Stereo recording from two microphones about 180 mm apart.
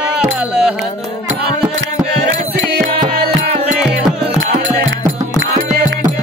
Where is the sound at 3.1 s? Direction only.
60° right (ahead or behind).